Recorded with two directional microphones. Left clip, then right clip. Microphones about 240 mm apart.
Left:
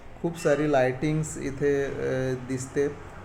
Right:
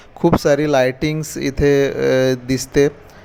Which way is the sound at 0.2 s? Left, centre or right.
Right.